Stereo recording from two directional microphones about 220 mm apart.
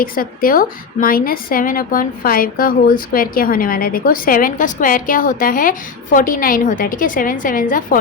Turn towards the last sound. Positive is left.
turn(degrees=40)  # may be behind; listen again after turning